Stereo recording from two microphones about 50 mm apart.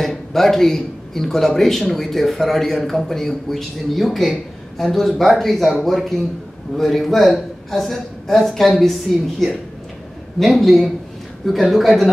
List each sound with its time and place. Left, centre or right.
0.0 s speech: centre